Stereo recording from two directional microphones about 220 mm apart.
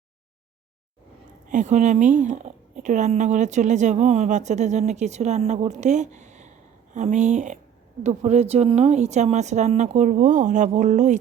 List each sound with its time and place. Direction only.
1.5 s a woman's voice: 35° right (ahead or behind)